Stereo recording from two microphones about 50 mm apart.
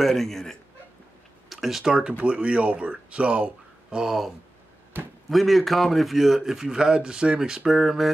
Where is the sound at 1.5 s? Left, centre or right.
Centre.